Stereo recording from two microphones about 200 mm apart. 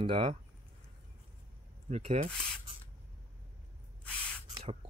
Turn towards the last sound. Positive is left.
turn(degrees=-30)  # may be behind; listen again after turning